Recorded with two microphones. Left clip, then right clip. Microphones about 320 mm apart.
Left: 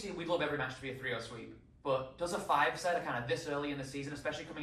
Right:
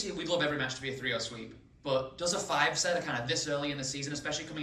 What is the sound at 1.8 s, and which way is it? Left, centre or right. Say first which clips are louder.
Speech: right 3 dB; centre.